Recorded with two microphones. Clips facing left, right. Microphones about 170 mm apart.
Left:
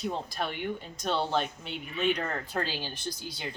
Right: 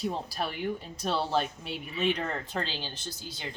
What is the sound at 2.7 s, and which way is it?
Speech, 15° left (ahead or behind).